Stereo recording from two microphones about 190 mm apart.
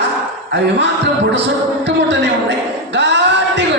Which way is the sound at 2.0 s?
65° right (ahead or behind).